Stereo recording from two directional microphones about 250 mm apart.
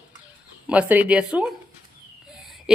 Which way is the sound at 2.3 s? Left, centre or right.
Centre.